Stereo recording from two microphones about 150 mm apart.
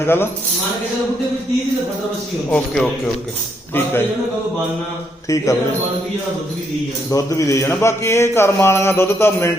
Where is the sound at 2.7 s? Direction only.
Centre (ahead or behind).